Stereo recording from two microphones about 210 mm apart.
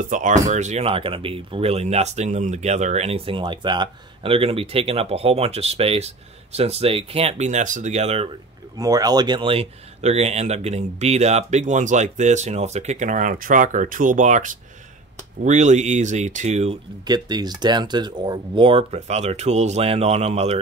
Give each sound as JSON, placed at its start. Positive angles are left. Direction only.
{"t": 0.0, "sound": "speech", "side_deg": -40}
{"t": 8.7, "sound": "speech", "side_deg": -15}